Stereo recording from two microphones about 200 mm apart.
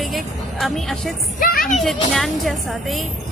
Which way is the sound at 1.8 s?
Centre (ahead or behind).